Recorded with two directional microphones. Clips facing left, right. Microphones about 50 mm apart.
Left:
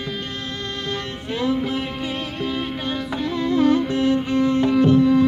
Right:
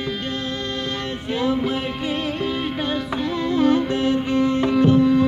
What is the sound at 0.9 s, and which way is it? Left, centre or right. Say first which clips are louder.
Music: right 1 dB; centre.